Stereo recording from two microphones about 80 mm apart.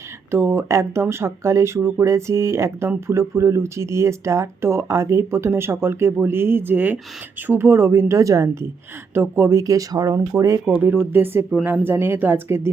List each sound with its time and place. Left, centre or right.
0.3 s speech: right
9.1 s speech: right
10.7 s speech: right